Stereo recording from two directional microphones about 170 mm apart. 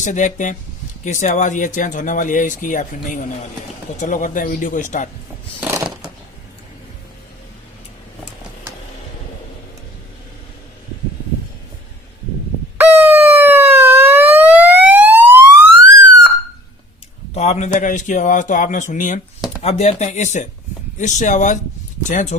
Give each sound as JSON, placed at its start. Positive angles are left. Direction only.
{"t": 0.0, "sound": "speech", "side_deg": 45}
{"t": 5.5, "sound": "a sound", "side_deg": -10}
{"t": 12.7, "sound": "siren", "side_deg": -10}
{"t": 17.3, "sound": "speech", "side_deg": 40}
{"t": 19.6, "sound": "speech", "side_deg": 40}